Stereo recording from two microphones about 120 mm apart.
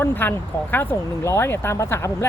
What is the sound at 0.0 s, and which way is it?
Speech, 15° left (ahead or behind).